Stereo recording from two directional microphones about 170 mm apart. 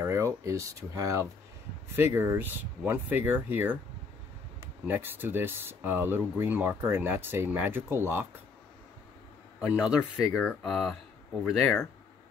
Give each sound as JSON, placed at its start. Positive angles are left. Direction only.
{"t": 0.0, "sound": "speech", "side_deg": -15}
{"t": 9.6, "sound": "speech", "side_deg": -5}
{"t": 11.6, "sound": "speech", "side_deg": 15}